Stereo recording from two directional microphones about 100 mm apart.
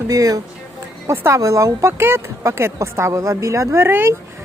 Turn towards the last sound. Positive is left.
turn(degrees=-25)  # may be behind; listen again after turning